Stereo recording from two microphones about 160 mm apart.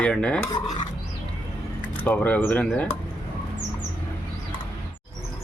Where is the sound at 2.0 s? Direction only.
10° left (ahead or behind).